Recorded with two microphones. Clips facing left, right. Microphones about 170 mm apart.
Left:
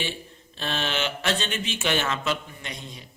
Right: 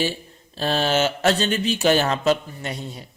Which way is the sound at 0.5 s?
40° right (ahead or behind).